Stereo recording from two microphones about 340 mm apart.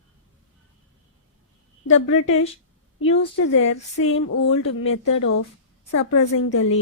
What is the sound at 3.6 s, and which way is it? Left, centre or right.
A woman's voice, left.